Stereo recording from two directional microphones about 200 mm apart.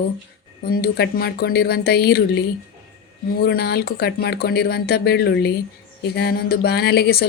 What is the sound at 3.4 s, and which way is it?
Speech, 55° left (ahead or behind).